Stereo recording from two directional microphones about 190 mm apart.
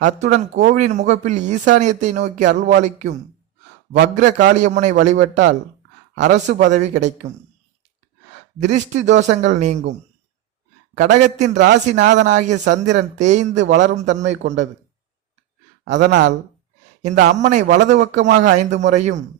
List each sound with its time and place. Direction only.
0.0 s speech: 40° right (ahead or behind)
8.5 s speech: 40° right (ahead or behind)
10.9 s speech: 40° right (ahead or behind)
16.0 s speech: 55° right (ahead or behind)
17.2 s speech: 40° right (ahead or behind)